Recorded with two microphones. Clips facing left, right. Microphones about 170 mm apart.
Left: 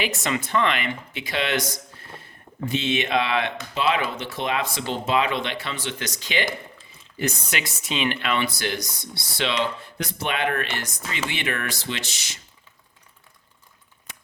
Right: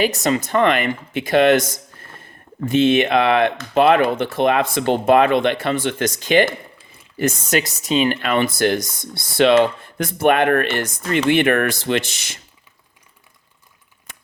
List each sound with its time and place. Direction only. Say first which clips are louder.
0.0 s speech: right 8 dB; 40° right (ahead or behind); by 12.4 s 55° right (ahead or behind)